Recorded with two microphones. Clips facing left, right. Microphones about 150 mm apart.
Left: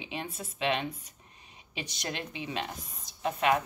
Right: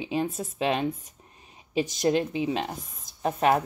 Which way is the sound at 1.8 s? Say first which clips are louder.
Right 13 dB; 45° right (ahead or behind).